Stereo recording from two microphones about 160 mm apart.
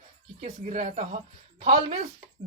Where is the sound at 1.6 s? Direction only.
40° right (ahead or behind).